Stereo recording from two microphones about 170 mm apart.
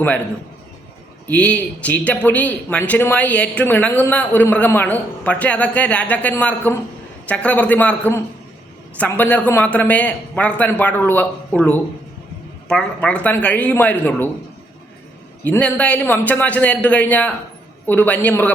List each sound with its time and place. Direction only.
1.3 s a man's voice: 10° left (ahead or behind)
15.4 s a man's voice: 10° left (ahead or behind)